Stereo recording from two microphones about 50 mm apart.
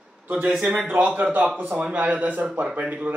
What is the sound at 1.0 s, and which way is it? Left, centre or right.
Speech, right.